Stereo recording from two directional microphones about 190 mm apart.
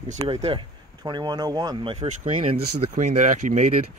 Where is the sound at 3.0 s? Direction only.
40° right (ahead or behind).